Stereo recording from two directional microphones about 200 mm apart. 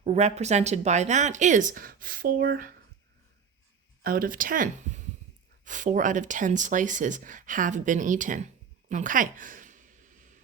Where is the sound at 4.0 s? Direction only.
45° right (ahead or behind).